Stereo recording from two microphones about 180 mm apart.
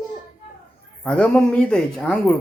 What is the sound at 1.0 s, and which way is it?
Speech, 5° left (ahead or behind).